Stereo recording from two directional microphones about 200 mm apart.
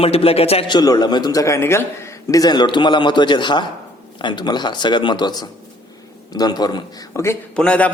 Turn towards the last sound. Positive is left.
turn(degrees=5)  # may be behind; listen again after turning